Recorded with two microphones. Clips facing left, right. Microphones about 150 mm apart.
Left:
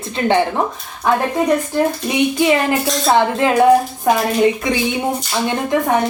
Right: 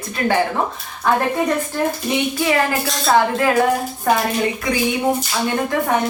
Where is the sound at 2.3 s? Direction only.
20° left (ahead or behind).